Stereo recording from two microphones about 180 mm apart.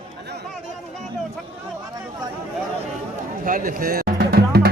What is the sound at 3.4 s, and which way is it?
Music, 50° right (ahead or behind).